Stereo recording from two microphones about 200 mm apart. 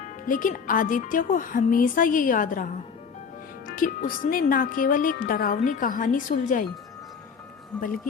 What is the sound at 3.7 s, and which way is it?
Speech, 40° left (ahead or behind).